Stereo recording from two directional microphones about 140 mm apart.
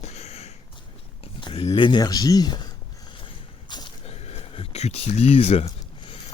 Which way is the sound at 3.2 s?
35° left (ahead or behind).